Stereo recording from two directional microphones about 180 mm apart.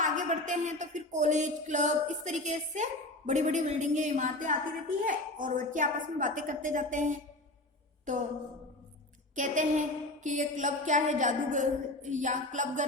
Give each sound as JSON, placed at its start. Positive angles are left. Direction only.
{"t": 0.0, "sound": "speech", "side_deg": -45}
{"t": 9.3, "sound": "speech", "side_deg": -45}